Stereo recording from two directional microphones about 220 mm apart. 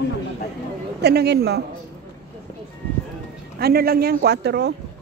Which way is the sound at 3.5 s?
45° right (ahead or behind).